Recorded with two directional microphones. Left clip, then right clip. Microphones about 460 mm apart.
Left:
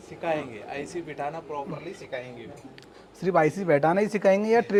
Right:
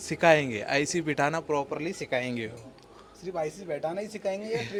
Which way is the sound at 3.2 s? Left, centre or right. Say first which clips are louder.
Left 10 dB; left.